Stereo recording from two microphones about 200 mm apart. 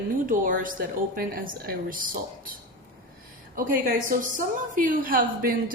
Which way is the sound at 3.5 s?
45° right (ahead or behind).